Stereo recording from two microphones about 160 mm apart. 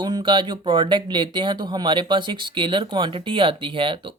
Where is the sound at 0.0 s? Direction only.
30° right (ahead or behind).